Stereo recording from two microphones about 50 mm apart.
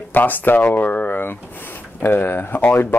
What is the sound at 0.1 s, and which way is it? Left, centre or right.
Speech, left.